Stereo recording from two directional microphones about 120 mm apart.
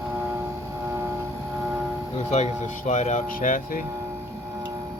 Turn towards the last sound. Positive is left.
turn(degrees=90)